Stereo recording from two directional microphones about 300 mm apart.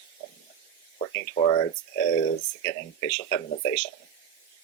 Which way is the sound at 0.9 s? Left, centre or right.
Centre.